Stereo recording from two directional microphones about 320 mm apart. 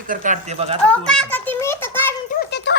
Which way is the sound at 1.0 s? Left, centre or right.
Centre.